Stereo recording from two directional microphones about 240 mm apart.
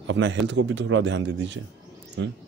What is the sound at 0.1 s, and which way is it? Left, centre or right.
Speech, right.